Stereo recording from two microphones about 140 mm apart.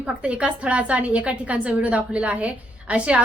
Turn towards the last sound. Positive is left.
turn(degrees=-10)  # may be behind; listen again after turning